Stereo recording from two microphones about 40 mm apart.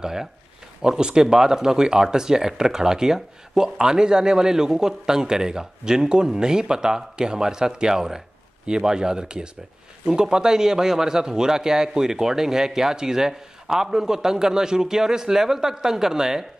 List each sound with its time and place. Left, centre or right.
0.0 s speech: centre